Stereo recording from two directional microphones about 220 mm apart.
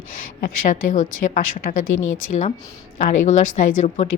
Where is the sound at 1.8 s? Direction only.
65° left (ahead or behind).